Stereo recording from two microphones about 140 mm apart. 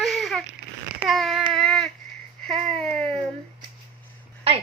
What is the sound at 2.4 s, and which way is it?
Babbling, centre (ahead or behind).